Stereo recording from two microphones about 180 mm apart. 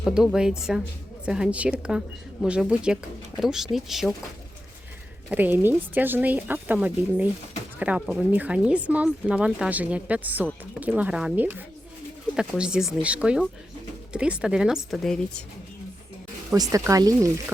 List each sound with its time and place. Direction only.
0.0 s speech: centre (ahead or behind)
5.3 s speech: 10° right (ahead or behind)
16.6 s speech: 20° right (ahead or behind)